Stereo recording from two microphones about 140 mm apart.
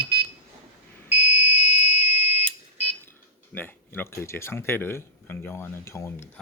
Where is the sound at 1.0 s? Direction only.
50° left (ahead or behind).